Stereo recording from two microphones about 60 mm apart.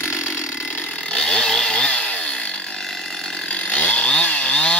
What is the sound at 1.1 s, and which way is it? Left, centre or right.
Chainsaw, centre.